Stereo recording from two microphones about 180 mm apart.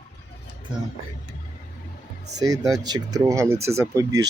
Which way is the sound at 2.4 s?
20° right (ahead or behind).